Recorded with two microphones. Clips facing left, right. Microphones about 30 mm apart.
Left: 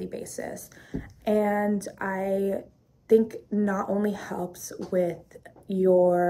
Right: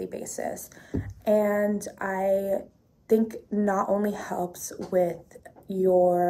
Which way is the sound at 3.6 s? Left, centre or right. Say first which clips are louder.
Right 2 dB; left.